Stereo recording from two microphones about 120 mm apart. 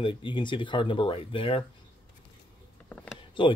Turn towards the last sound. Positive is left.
turn(degrees=40)  # may be behind; listen again after turning